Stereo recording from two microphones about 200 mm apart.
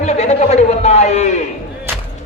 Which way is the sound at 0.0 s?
35° left (ahead or behind).